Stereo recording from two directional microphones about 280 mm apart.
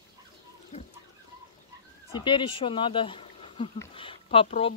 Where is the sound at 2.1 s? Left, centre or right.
Centre.